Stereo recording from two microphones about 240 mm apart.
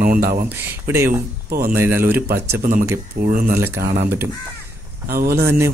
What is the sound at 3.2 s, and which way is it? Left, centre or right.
Speech, right.